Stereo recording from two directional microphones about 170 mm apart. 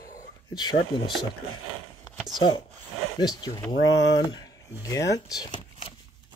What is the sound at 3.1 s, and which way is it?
Speech, 25° left (ahead or behind).